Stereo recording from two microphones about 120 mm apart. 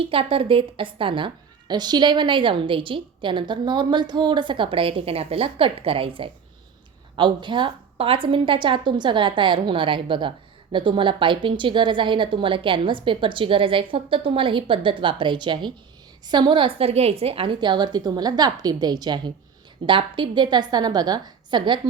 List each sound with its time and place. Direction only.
0.0 s a woman's voice: 50° right (ahead or behind)